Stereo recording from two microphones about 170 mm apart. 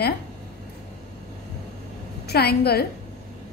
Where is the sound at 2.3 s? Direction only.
70° left (ahead or behind).